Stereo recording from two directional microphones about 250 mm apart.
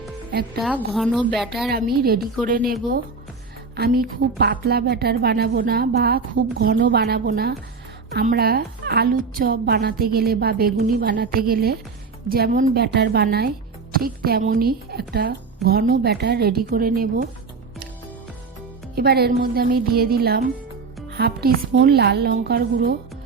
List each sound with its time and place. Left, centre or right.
0.6 s a woman's voice: centre
1.7 s a woman's voice: right
3.8 s a woman's voice: right
18.9 s a woman's voice: right